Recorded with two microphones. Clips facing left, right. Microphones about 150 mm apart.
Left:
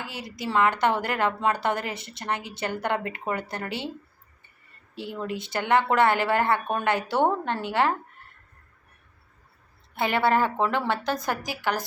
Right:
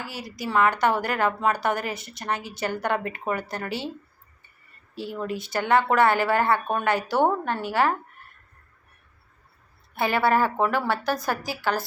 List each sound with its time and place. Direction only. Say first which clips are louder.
0.0 s a woman's voice: right 1 dB; 20° left (ahead or behind)
5.2 s a woman's voice: right 2 dB; 20° left (ahead or behind)
9.9 s a woman's voice: right 1 dB; 20° left (ahead or behind)